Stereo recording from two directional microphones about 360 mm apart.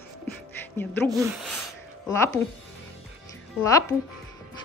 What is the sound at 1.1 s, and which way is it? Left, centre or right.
Speech, centre.